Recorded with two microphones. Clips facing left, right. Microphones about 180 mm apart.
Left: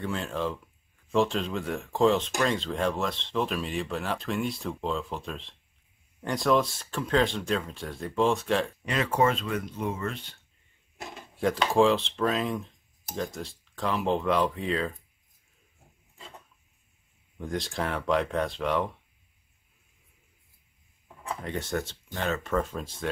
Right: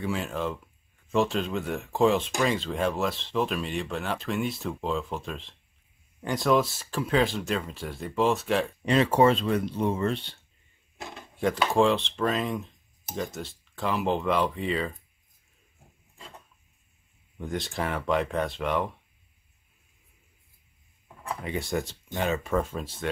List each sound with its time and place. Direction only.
0.0 s speech: 5° right (ahead or behind)
8.8 s speech: 30° right (ahead or behind)
11.0 s speech: centre (ahead or behind)
17.4 s speech: centre (ahead or behind)
21.4 s speech: 10° right (ahead or behind)